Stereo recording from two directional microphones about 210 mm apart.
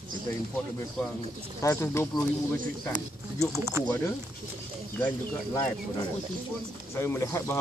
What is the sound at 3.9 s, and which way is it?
Speech, 15° left (ahead or behind).